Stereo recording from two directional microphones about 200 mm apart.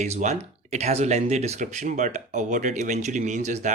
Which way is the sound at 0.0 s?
35° right (ahead or behind).